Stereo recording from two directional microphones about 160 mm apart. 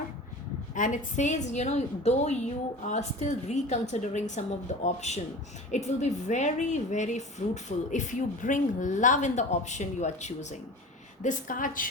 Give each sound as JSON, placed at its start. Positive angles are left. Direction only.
{"t": 0.7, "sound": "a woman's voice", "side_deg": 55}